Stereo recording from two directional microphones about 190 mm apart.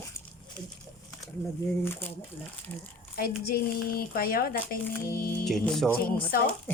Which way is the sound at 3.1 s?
50° left (ahead or behind).